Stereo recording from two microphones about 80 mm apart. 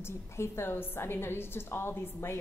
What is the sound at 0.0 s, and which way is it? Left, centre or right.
A woman's voice, left.